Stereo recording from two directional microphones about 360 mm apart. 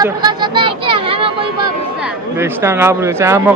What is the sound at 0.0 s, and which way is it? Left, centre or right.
Speech, centre.